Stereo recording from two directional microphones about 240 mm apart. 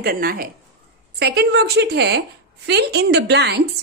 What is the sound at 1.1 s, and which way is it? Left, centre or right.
A woman's voice, right.